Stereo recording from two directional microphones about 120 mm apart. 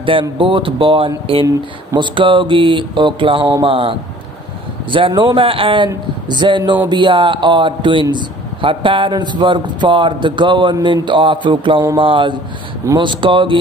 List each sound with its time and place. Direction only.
0.0 s a man's voice: 50° right (ahead or behind)
4.9 s a man's voice: 45° right (ahead or behind)